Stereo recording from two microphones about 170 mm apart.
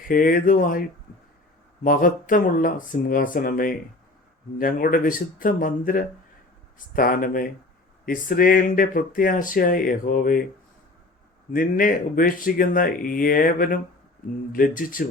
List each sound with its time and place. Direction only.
0.1 s speech: 55° left (ahead or behind)
11.5 s speech: 55° left (ahead or behind)